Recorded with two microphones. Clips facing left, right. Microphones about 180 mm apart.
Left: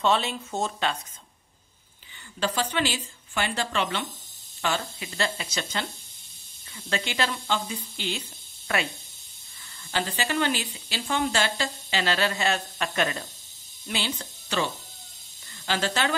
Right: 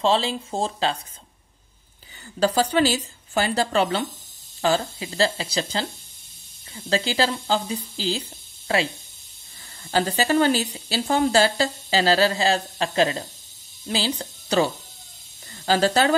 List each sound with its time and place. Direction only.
0.0 s speech: 30° right (ahead or behind)
2.4 s speech: 35° right (ahead or behind)
9.8 s speech: 40° right (ahead or behind)